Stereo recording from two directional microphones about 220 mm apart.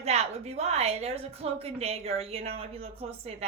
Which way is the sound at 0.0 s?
30° right (ahead or behind).